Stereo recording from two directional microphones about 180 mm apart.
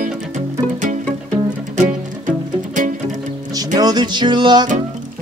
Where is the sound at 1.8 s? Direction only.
45° right (ahead or behind).